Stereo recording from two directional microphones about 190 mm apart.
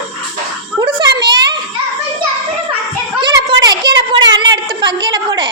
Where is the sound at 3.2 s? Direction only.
20° right (ahead or behind).